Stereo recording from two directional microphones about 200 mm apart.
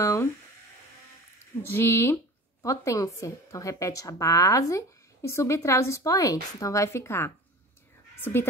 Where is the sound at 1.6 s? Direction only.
10° left (ahead or behind).